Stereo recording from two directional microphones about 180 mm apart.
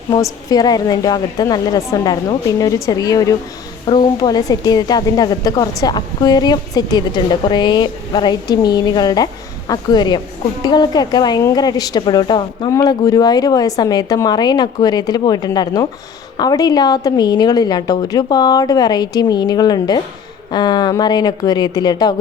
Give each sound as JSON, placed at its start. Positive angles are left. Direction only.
{"t": 0.1, "sound": "a woman's voice", "side_deg": 20}